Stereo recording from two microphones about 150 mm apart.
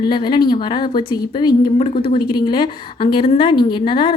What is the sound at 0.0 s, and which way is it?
A woman's voice, 30° left (ahead or behind).